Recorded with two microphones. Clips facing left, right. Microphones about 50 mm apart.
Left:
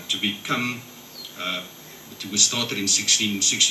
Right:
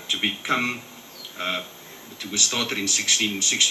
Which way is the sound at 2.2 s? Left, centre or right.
Centre.